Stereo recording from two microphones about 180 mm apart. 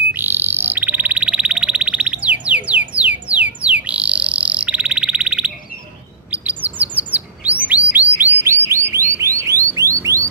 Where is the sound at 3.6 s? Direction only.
5° right (ahead or behind).